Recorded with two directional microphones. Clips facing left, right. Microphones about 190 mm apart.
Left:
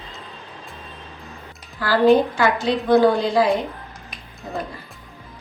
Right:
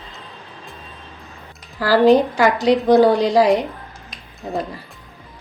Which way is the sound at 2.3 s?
40° right (ahead or behind).